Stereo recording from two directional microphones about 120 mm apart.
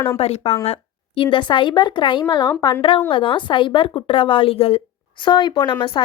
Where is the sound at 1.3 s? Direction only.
40° left (ahead or behind).